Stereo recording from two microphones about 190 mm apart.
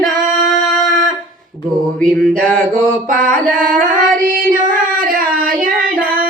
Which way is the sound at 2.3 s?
45° right (ahead or behind).